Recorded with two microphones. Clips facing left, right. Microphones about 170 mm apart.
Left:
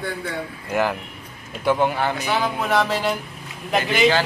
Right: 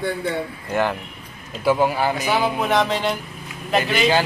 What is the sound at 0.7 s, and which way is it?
A man's voice, centre (ahead or behind).